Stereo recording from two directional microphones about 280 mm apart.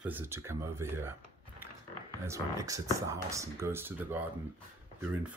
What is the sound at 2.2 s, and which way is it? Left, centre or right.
Speech, centre.